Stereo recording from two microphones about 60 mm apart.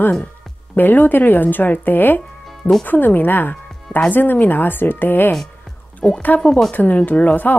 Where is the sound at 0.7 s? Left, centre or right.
Left.